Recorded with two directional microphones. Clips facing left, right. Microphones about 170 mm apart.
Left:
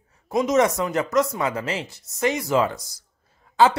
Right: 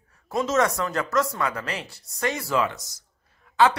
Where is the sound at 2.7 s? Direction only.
30° left (ahead or behind).